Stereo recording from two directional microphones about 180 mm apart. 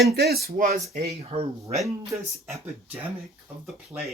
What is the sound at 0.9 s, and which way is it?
Speech, 35° right (ahead or behind).